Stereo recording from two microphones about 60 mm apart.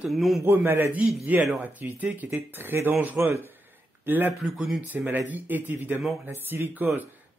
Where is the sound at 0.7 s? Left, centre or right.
Right.